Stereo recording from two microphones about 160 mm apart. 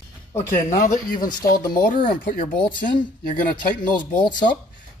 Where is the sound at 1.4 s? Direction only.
70° left (ahead or behind).